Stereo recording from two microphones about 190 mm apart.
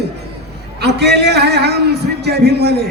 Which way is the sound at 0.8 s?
60° right (ahead or behind).